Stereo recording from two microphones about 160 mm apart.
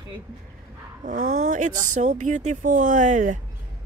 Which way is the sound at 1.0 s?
60° right (ahead or behind).